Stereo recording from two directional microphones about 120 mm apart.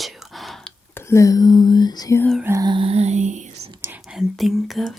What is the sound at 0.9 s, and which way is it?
Speech, 25° left (ahead or behind).